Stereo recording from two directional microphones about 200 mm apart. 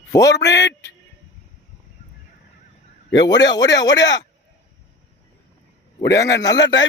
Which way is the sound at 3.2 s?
20° left (ahead or behind).